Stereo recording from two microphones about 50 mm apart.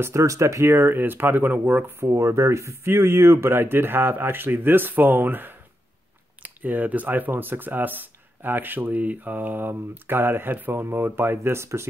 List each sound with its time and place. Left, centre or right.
0.0 s speech: right
0.9 s speech: right
2.0 s speech: right